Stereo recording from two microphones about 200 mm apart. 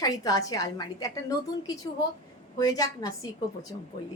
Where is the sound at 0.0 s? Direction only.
20° left (ahead or behind).